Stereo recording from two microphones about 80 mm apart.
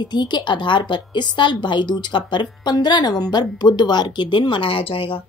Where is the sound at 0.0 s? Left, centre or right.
Left.